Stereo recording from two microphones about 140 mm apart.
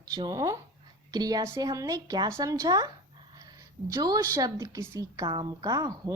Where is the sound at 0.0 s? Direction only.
30° right (ahead or behind).